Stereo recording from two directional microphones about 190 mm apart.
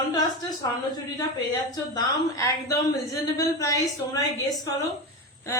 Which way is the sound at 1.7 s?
20° left (ahead or behind).